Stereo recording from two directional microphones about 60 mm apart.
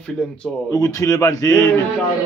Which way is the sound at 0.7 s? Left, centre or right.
Left.